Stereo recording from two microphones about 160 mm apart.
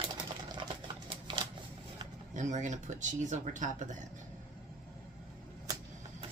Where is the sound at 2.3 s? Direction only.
50° right (ahead or behind).